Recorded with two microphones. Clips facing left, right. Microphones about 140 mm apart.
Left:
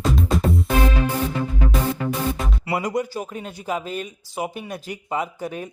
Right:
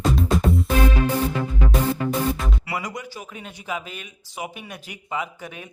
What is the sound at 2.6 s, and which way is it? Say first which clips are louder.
Speech: left 7 dB; 35° left (ahead or behind).